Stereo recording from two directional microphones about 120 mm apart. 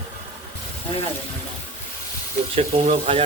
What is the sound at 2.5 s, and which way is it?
Speech, 60° right (ahead or behind).